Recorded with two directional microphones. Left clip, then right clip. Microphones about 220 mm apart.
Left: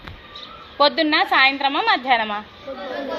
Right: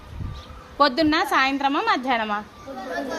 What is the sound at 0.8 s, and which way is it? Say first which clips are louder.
A woman's voice: left 2 dB; 65° right (ahead or behind).